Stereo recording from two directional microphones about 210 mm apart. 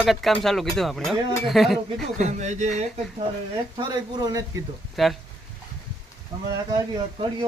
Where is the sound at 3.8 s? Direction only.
20° right (ahead or behind).